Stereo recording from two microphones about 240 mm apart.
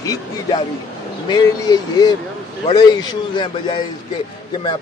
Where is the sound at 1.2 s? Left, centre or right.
Centre.